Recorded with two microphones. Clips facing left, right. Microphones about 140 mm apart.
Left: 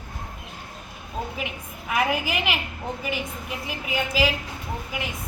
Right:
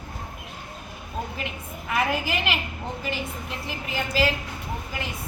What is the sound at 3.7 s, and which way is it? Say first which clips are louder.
Speech: left 2 dB; 10° left (ahead or behind).